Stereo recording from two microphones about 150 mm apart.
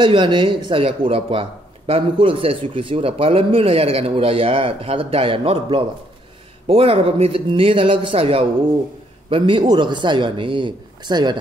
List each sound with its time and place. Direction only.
0.0 s speech: 30° right (ahead or behind)